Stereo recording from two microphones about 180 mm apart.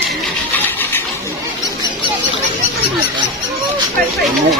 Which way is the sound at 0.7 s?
10° left (ahead or behind).